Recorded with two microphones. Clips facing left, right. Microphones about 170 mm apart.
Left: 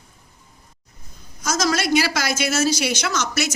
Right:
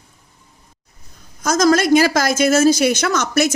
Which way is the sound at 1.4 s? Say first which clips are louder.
Right 7 dB; 50° right (ahead or behind).